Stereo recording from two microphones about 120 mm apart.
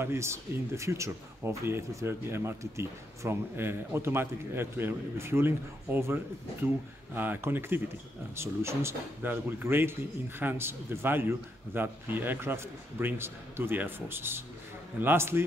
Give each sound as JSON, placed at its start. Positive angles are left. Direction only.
{"t": 0.0, "sound": "speech", "side_deg": -20}